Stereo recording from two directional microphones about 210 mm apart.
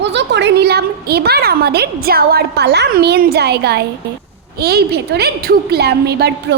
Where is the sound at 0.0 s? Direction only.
55° right (ahead or behind).